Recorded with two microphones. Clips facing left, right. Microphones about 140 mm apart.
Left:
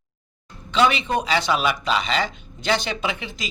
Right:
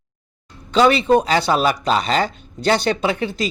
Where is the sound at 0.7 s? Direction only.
40° right (ahead or behind).